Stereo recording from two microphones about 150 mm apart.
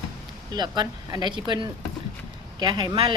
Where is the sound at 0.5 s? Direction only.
30° right (ahead or behind).